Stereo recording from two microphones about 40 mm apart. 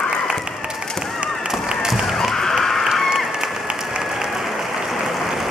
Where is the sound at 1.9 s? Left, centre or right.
Centre.